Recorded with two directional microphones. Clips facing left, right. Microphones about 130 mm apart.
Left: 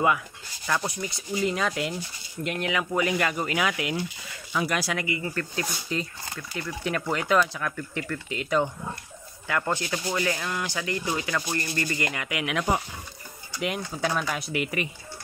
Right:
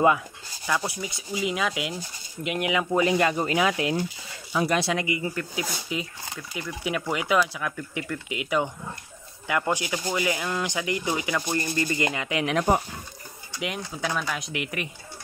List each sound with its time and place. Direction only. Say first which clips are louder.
0.7 s speech: right 1 dB; 5° right (ahead or behind)
2.7 s speech: right 4 dB; 20° right (ahead or behind); by 12.8 s 40° right (ahead or behind)
13.6 s speech: left 2 dB; centre (ahead or behind)